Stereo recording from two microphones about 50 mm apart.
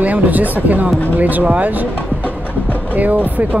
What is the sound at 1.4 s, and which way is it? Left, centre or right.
Speech, right.